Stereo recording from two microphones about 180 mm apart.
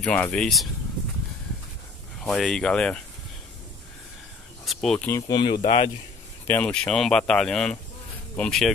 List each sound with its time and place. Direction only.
0.0 s speech: 5° left (ahead or behind)
2.1 s speech: centre (ahead or behind)
4.6 s speech: 5° left (ahead or behind)
5.3 s speech: 25° left (ahead or behind)
5.6 s speech: 35° left (ahead or behind)
6.4 s speech: 10° left (ahead or behind)